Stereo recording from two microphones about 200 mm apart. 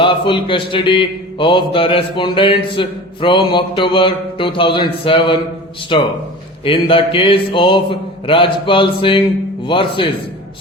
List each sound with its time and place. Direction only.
0.0 s mantra: 25° left (ahead or behind)